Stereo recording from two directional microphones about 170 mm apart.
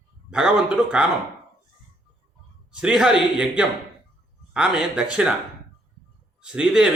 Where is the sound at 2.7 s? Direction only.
5° right (ahead or behind).